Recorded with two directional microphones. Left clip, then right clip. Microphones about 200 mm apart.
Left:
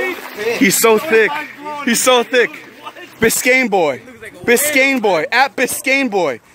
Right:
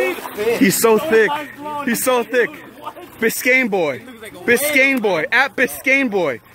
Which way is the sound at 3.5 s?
15° left (ahead or behind).